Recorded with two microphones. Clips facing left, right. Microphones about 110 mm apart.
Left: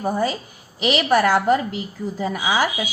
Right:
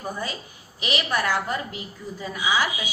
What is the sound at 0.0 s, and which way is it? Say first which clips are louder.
A woman's voice: left 9 dB; 50° left (ahead or behind).